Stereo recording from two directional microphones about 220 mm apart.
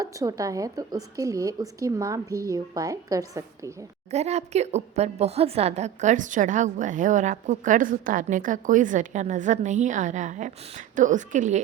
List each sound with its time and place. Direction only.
0.0 s a woman's voice: 15° right (ahead or behind)
4.1 s a woman's voice: 30° right (ahead or behind)